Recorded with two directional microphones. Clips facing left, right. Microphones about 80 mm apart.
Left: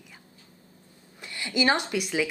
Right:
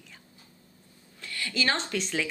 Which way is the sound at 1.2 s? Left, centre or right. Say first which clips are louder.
Left 5 dB; centre.